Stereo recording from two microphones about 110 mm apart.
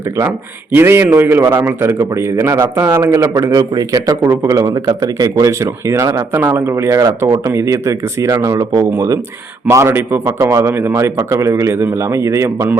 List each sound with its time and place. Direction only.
0.7 s a man's voice: 20° right (ahead or behind)